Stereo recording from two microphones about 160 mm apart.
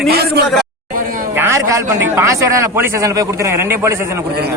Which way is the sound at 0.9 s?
60° right (ahead or behind).